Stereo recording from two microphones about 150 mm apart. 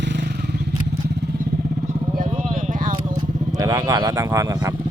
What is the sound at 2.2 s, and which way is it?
Vehicle, 45° right (ahead or behind).